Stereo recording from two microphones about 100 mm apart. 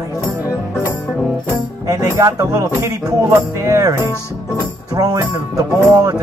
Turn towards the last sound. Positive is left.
turn(degrees=-40)  # may be behind; listen again after turning